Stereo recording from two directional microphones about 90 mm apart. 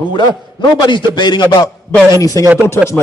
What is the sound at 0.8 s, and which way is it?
Speech, 55° left (ahead or behind).